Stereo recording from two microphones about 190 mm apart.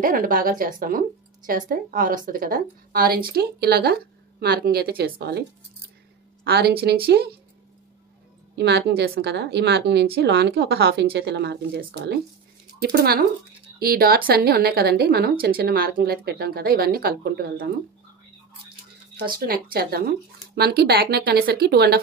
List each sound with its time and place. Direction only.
0.0 s a woman's voice: 45° right (ahead or behind)
6.4 s a woman's voice: 55° right (ahead or behind)
8.5 s a woman's voice: 60° right (ahead or behind)
19.1 s a woman's voice: 50° right (ahead or behind)